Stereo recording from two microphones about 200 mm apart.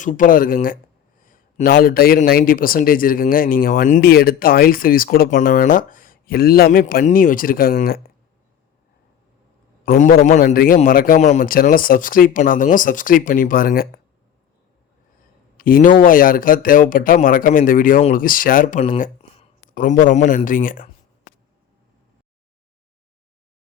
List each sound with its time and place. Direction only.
0.0 s a man's voice: 40° left (ahead or behind)
9.8 s a man's voice: 45° left (ahead or behind)
15.5 s a man's voice: 45° left (ahead or behind)